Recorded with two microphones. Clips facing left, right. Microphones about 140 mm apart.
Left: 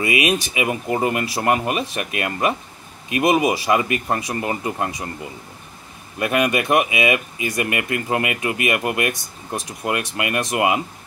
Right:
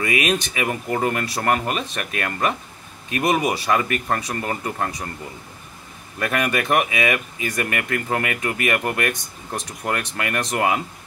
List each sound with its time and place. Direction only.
0.0 s speech: 15° left (ahead or behind)
6.1 s speech: 15° left (ahead or behind)